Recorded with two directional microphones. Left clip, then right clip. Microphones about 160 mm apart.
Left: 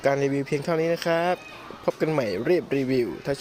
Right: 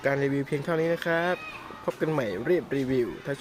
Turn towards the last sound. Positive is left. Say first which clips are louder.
# left 3 dB
turn(degrees=25)  # may be behind; listen again after turning